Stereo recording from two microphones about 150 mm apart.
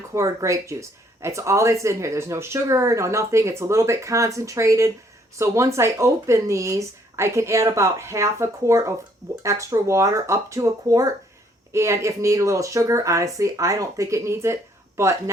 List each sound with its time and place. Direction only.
0.1 s speech: 20° right (ahead or behind)